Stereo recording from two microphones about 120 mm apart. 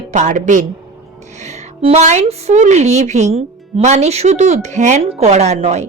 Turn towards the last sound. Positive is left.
turn(degrees=-70)  # may be behind; listen again after turning